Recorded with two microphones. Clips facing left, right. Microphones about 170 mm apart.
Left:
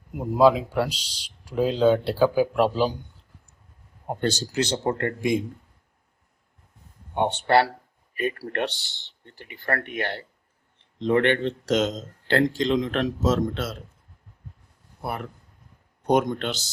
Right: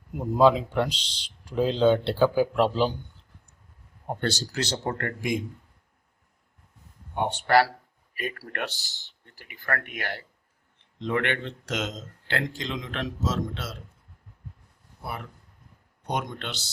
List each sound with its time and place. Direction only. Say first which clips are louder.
0.1 s speech: left 2 dB; 10° left (ahead or behind)
4.1 s speech: left 3 dB; 15° left (ahead or behind)
7.1 s a man's voice: left 2 dB; 25° left (ahead or behind); by 13.7 s 50° left (ahead or behind)
15.0 s speech: left 5 dB; 50° left (ahead or behind)